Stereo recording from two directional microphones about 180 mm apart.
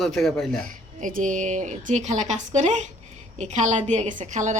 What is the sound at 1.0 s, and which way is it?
A woman's voice, 45° right (ahead or behind).